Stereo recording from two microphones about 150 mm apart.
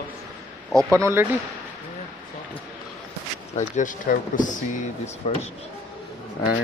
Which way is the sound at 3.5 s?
55° left (ahead or behind).